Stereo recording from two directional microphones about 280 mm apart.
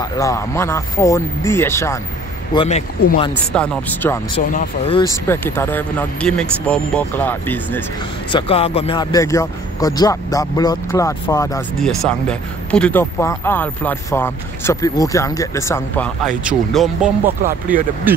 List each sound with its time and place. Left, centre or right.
0.0 s speech: centre
3.5 s speech: centre
4.5 s speech: left
4.9 s speech: centre
8.3 s speech: centre
11.7 s speech: centre
16.4 s speech: centre
17.5 s speech: right